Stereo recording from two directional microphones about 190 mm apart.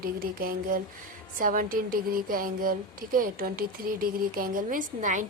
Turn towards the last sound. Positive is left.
turn(degrees=-45)  # may be behind; listen again after turning